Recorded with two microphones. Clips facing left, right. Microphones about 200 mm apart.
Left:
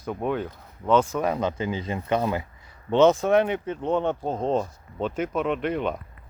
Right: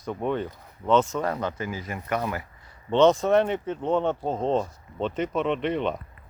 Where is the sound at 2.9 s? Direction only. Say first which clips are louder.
Left 1 dB; 5° left (ahead or behind).